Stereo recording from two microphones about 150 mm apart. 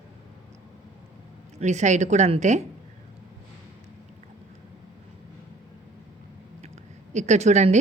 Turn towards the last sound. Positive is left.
turn(degrees=-50)  # may be behind; listen again after turning